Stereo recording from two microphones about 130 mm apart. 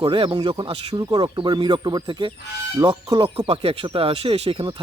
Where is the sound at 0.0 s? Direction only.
40° right (ahead or behind).